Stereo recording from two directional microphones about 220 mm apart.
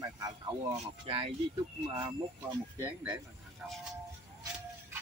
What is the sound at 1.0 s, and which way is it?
Speech, 25° right (ahead or behind).